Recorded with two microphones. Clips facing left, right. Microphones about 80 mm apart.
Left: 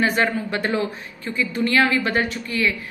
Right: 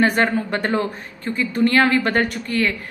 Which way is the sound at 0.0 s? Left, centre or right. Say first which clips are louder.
Right 3 dB; right.